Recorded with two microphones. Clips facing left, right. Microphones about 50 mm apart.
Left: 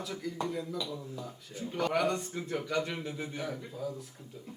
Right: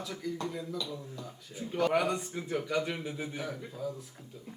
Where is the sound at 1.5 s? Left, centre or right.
Centre.